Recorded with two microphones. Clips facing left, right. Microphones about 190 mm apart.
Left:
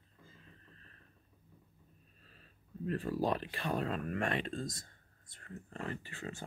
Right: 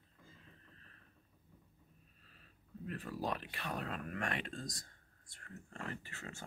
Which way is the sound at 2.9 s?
35° left (ahead or behind).